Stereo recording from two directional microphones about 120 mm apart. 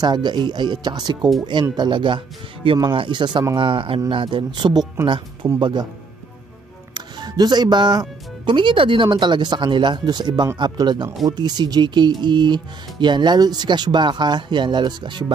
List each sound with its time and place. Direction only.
0.0 s speech: 40° right (ahead or behind)
6.9 s speech: 35° right (ahead or behind)